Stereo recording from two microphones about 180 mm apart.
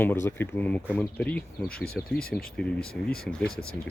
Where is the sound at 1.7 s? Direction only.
60° left (ahead or behind).